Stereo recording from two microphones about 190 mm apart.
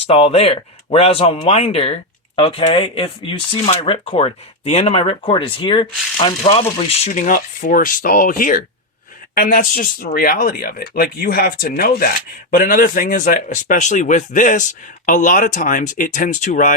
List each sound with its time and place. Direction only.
0.1 s speech: 30° left (ahead or behind)